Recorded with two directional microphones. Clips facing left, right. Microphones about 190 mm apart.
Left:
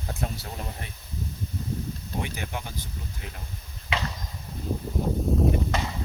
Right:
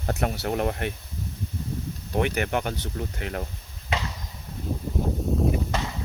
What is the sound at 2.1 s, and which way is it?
Speech, 65° right (ahead or behind).